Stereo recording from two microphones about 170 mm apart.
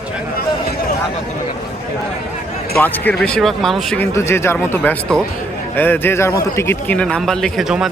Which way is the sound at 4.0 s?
15° left (ahead or behind).